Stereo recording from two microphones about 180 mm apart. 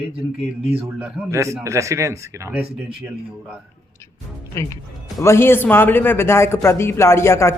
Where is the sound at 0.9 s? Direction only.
15° right (ahead or behind).